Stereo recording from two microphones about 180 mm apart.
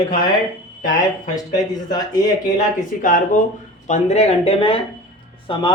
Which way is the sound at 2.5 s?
45° left (ahead or behind).